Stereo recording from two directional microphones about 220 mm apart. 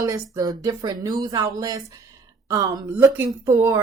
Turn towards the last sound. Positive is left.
turn(degrees=-15)  # may be behind; listen again after turning